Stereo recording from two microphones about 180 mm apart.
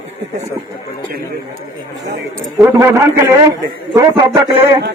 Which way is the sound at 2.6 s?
15° right (ahead or behind).